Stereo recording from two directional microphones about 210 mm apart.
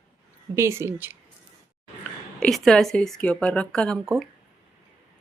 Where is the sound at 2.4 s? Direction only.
Centre (ahead or behind).